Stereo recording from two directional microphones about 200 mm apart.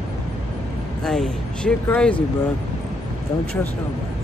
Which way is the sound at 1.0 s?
5° left (ahead or behind).